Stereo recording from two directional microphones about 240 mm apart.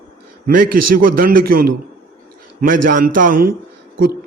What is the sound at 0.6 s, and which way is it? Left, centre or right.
Speech, right.